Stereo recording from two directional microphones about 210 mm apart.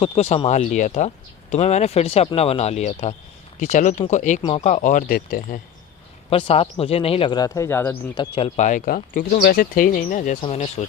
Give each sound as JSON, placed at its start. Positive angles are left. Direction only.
{"t": 0.0, "sound": "speech", "side_deg": 30}
{"t": 6.3, "sound": "speech", "side_deg": 30}
{"t": 8.1, "sound": "speech", "side_deg": 25}